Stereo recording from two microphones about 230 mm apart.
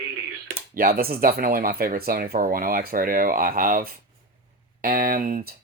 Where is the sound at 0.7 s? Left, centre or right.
Right.